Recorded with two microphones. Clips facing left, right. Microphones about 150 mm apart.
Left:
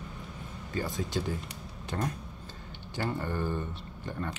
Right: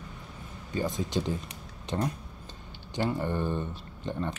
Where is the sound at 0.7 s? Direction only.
20° right (ahead or behind).